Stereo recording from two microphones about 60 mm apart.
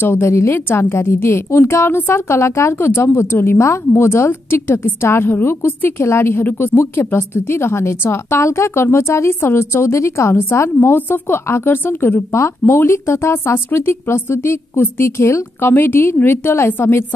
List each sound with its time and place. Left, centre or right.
0.0 s a woman's voice: left
6.4 s a woman's voice: left
15.6 s a woman's voice: left